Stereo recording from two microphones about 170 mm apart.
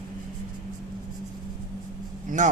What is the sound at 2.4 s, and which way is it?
Speech, 45° right (ahead or behind).